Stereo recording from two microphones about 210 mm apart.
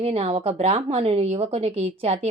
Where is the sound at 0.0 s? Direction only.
30° right (ahead or behind).